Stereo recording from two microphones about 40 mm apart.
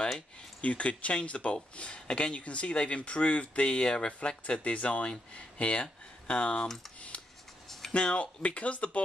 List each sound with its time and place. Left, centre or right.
0.6 s speech: left
4.7 s speech: left
7.9 s speech: left